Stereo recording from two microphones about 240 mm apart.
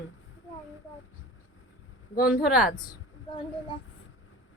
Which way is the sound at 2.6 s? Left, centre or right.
Left.